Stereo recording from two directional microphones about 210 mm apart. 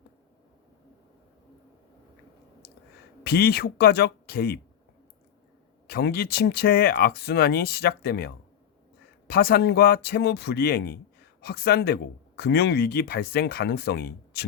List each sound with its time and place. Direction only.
3.2 s speech: 50° left (ahead or behind)
5.9 s speech: 50° left (ahead or behind)